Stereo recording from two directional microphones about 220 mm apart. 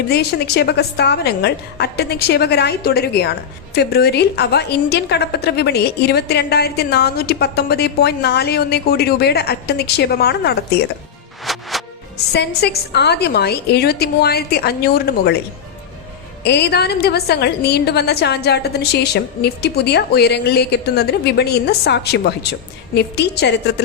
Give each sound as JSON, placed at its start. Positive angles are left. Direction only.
{"t": 0.1, "sound": "a woman's voice", "side_deg": 50}
{"t": 11.5, "sound": "music", "side_deg": 0}
{"t": 12.1, "sound": "a woman's voice", "side_deg": 50}
{"t": 16.4, "sound": "a woman's voice", "side_deg": 50}